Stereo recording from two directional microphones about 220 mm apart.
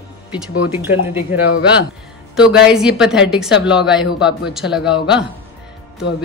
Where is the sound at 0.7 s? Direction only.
10° right (ahead or behind).